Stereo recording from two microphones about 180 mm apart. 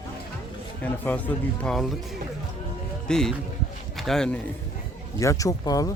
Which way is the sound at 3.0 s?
5° left (ahead or behind).